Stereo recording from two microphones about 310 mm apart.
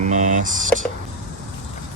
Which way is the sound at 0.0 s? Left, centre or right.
Right.